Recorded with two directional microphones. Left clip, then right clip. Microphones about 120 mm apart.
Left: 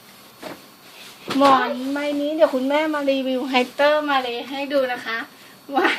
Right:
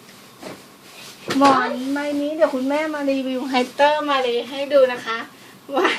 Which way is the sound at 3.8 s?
25° left (ahead or behind).